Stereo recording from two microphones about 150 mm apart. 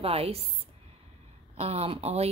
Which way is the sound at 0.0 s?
40° right (ahead or behind).